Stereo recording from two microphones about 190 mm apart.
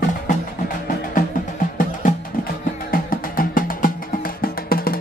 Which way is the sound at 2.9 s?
50° left (ahead or behind).